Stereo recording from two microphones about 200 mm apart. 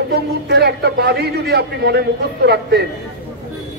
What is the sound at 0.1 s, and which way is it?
A man's voice, 55° right (ahead or behind).